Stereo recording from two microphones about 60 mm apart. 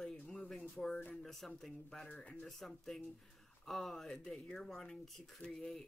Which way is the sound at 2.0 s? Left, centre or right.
Centre.